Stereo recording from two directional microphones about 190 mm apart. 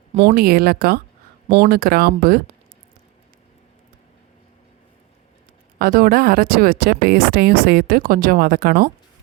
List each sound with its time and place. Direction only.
0.3 s speech: 55° right (ahead or behind)
5.8 s speech: 50° right (ahead or behind)